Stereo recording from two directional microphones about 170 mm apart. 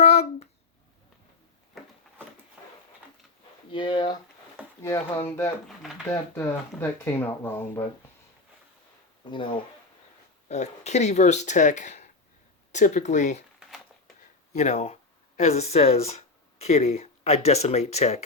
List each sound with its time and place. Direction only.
0.0 s a sound: 40° left (ahead or behind)
3.7 s a sound: 30° left (ahead or behind)
4.5 s speech: 15° left (ahead or behind)
9.2 s speech: 30° left (ahead or behind)
10.5 s speech: 40° left (ahead or behind)
14.5 s speech: 40° left (ahead or behind)